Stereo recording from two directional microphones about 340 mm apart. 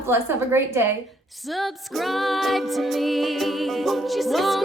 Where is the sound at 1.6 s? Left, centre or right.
Centre.